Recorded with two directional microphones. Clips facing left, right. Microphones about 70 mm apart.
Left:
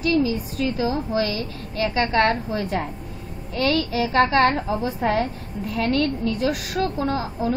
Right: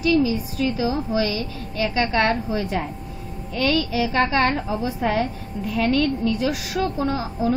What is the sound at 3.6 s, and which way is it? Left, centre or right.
A woman's voice, left.